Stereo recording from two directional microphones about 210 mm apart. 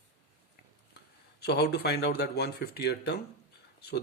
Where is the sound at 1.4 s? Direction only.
50° left (ahead or behind).